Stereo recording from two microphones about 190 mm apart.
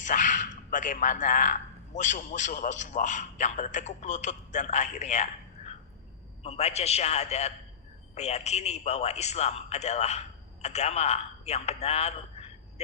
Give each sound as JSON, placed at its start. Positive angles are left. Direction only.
{"t": 0.0, "sound": "a man's voice", "side_deg": 40}